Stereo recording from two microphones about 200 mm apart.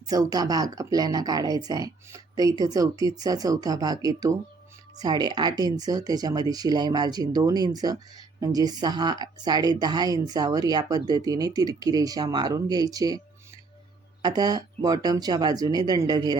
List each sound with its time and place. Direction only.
0.1 s speech: 20° right (ahead or behind)